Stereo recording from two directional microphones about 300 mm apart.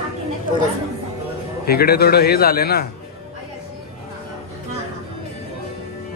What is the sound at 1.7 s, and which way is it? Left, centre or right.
A man's voice, left.